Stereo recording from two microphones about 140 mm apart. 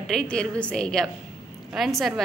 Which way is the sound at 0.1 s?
5° left (ahead or behind).